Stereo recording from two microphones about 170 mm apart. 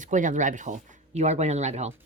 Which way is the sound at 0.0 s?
50° right (ahead or behind).